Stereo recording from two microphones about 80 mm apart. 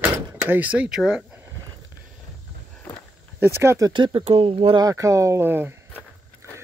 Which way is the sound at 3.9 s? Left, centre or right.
Right.